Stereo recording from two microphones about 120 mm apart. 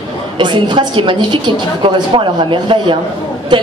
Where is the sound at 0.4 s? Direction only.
40° right (ahead or behind).